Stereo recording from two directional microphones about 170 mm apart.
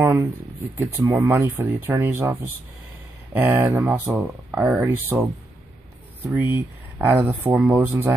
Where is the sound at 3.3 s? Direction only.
10° right (ahead or behind).